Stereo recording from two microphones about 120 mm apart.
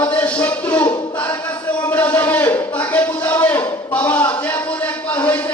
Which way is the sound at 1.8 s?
15° left (ahead or behind).